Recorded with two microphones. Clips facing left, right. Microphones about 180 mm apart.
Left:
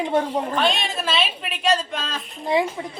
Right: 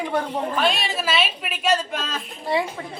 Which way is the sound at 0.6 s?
5° right (ahead or behind).